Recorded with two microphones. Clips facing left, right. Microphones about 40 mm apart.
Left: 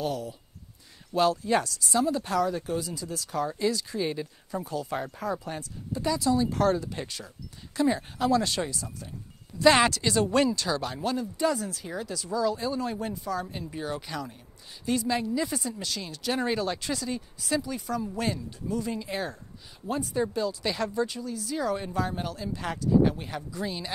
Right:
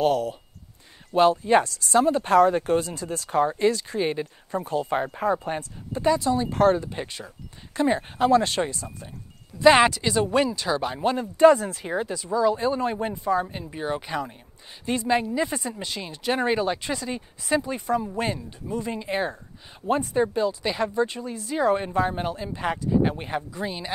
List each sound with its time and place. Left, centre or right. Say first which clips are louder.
0.0 s speech: right 9 dB; right
1.1 s speech: right 6 dB; right
9.6 s speech: right 4 dB; centre; by 20.2 s right
20.3 s speech: right 4 dB; right